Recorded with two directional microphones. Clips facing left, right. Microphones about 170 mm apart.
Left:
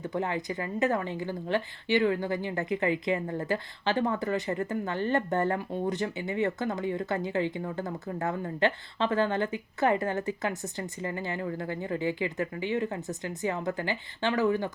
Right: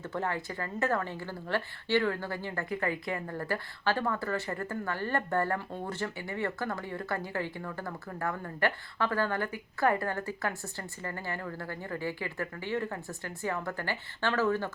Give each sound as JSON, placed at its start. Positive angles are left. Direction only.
{"t": 0.0, "sound": "a woman's voice", "side_deg": 15}